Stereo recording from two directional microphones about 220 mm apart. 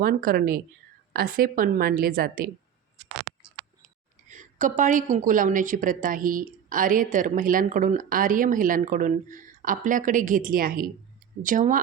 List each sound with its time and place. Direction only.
0.0 s a woman's voice: 40° right (ahead or behind)
4.3 s a woman's voice: 35° right (ahead or behind)